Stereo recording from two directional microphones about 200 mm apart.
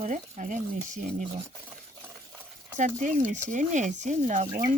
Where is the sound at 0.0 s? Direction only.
40° right (ahead or behind).